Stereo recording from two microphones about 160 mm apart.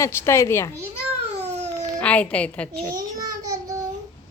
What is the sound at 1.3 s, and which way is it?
Babbling, 45° right (ahead or behind).